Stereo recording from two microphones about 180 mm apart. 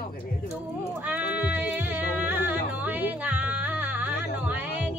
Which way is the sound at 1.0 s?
10° right (ahead or behind).